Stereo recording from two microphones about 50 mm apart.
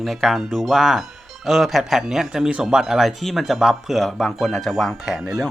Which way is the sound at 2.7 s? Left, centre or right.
Centre.